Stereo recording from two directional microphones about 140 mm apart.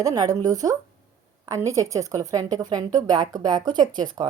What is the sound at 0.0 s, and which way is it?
Speech, 25° right (ahead or behind).